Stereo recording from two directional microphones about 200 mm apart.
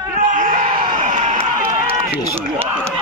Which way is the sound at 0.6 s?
25° right (ahead or behind).